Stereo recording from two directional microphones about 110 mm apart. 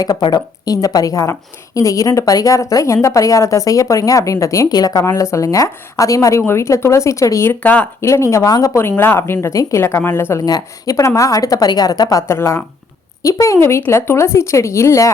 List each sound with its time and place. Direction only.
0.2 s a woman's voice: 35° left (ahead or behind)
7.6 s speech: 15° left (ahead or behind)
8.1 s a woman's voice: 25° left (ahead or behind)
10.4 s a woman's voice: 30° left (ahead or behind)